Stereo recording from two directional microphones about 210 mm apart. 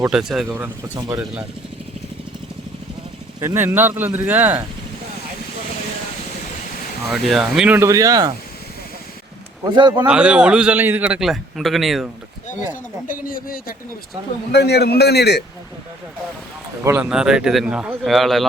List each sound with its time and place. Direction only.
0.1 s a man's voice: centre (ahead or behind)
3.4 s speech: 10° right (ahead or behind)
7.1 s speech: centre (ahead or behind); by 8.3 s 15° right (ahead or behind)
9.6 s a man's voice: 20° right (ahead or behind)
9.9 s a man's voice: 5° right (ahead or behind)
13.1 s a man's voice: 40° left (ahead or behind)
16.8 s a man's voice: 10° right (ahead or behind)